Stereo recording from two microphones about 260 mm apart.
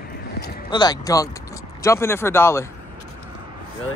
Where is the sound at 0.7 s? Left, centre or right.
Centre.